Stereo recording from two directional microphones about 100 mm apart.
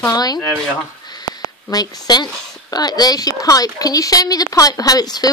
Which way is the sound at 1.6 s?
40° left (ahead or behind).